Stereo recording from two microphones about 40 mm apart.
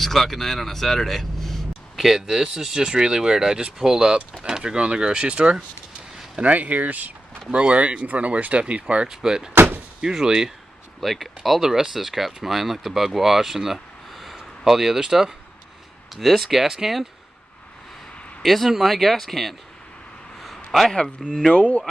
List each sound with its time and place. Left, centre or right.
0.0 s speech: centre
2.0 s speech: centre; by 5.6 s right
6.4 s speech: right
7.4 s speech: right
9.1 s speech: centre
9.5 s door: right
10.1 s speech: centre
11.0 s speech: centre
14.3 s a sound: centre
15.0 s speech: centre
18.4 s speech: centre
20.3 s a sound: centre
21.2 s speech: centre
21.5 s speech: left